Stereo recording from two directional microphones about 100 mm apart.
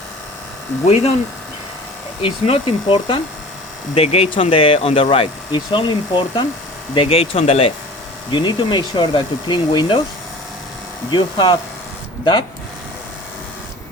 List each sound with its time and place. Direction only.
0.9 s speech: 90° left
2.2 s speech: 65° left (ahead or behind)
3.9 s speech: 85° left; by 5.5 s 65° left (ahead or behind)
5.5 s speech: 50° left (ahead or behind)
6.9 s speech: 70° left (ahead or behind); by 7.7 s 85° left
8.3 s speech: 50° left (ahead or behind)
11.1 s speech: 50° left (ahead or behind)